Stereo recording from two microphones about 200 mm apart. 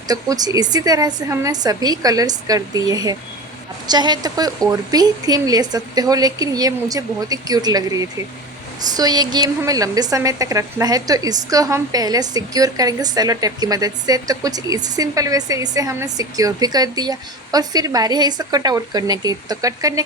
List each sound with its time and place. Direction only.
0.1 s a woman's voice: 20° right (ahead or behind)